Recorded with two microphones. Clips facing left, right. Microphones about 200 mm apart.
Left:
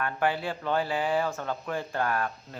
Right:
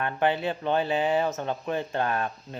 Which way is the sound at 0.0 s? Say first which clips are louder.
Right 3 dB; 20° right (ahead or behind).